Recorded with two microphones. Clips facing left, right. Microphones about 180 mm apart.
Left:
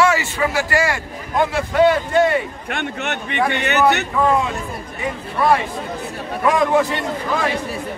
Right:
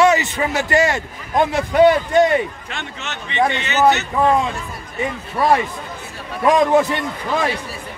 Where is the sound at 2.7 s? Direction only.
60° left (ahead or behind).